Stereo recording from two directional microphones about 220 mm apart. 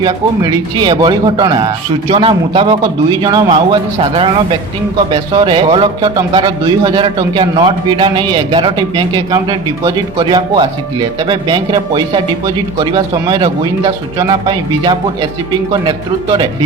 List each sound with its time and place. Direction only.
0.0 s a man's voice: 20° right (ahead or behind)